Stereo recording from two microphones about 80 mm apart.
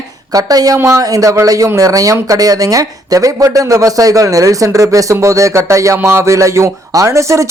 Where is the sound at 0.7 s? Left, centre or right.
Right.